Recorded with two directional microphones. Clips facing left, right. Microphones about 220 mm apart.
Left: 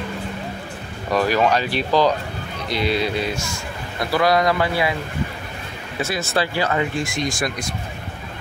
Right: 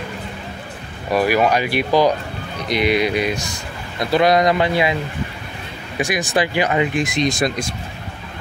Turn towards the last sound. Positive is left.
turn(degrees=-20)  # may be behind; listen again after turning